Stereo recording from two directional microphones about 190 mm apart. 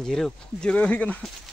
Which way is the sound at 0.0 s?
5° left (ahead or behind).